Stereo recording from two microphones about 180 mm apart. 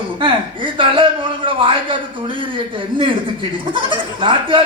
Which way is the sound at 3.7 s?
25° right (ahead or behind).